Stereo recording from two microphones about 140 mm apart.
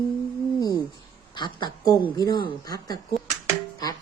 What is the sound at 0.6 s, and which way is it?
A woman's voice, 25° left (ahead or behind).